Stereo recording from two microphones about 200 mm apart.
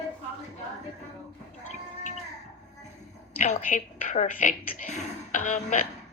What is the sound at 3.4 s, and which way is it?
A woman's voice, 35° left (ahead or behind).